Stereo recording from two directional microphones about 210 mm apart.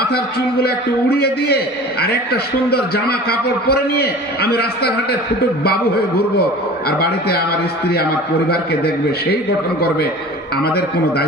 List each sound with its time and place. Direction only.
1.1 s a man's voice: 50° left (ahead or behind)
6.8 s a man's voice: 50° left (ahead or behind)
8.4 s a man's voice: 50° left (ahead or behind)
10.6 s a man's voice: 50° left (ahead or behind)